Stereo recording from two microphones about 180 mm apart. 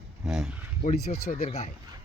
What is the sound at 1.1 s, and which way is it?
Speech, 35° left (ahead or behind).